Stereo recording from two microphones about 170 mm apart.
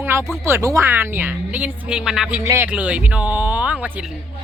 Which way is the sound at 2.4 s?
15° right (ahead or behind).